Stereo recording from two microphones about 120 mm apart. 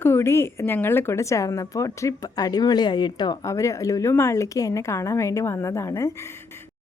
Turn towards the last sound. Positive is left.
turn(degrees=25)  # may be behind; listen again after turning